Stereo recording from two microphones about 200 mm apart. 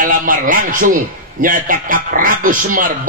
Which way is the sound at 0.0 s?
45° right (ahead or behind).